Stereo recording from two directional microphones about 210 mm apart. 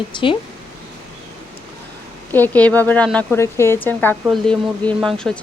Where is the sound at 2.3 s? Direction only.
10° left (ahead or behind).